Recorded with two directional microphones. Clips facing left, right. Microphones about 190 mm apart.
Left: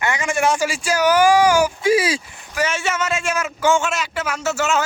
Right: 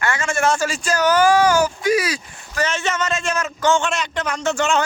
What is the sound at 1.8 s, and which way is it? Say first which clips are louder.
Speech: left 2 dB; 25° left (ahead or behind).